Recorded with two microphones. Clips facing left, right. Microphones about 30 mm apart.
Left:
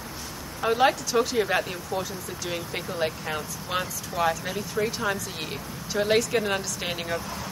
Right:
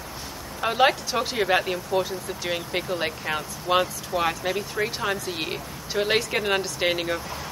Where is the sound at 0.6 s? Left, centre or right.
Right.